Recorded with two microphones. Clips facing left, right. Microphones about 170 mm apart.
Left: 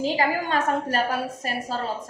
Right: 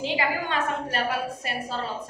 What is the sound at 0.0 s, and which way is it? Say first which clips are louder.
A woman's voice: left 3 dB; 40° left (ahead or behind).